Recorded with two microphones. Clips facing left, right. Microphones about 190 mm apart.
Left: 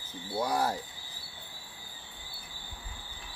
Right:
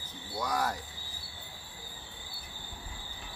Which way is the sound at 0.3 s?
30° left (ahead or behind).